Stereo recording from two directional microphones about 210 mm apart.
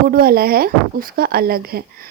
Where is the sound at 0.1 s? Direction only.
45° right (ahead or behind).